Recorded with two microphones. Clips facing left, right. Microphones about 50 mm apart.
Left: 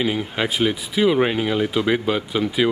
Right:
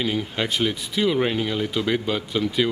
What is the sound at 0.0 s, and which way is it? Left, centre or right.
Speech, centre.